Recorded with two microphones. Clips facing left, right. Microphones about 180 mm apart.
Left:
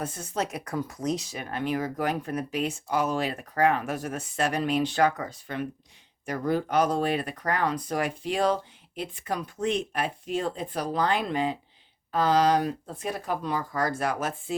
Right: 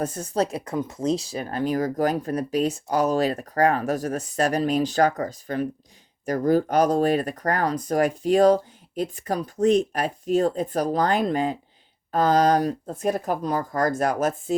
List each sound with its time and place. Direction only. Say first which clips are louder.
0.0 s speech: right 6 dB; 40° right (ahead or behind)